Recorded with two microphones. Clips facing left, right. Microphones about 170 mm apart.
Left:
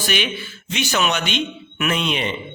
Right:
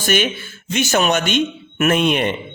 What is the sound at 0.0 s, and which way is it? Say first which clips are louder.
A man's voice: right 5 dB; 45° right (ahead or behind).